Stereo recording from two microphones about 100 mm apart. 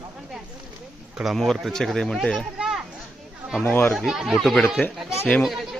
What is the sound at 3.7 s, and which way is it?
Speech, 20° left (ahead or behind).